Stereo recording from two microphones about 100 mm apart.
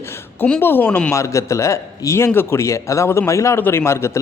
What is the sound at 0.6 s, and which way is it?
Speech, 20° left (ahead or behind).